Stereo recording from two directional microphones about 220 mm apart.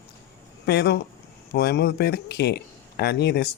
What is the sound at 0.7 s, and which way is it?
Speech, 50° left (ahead or behind).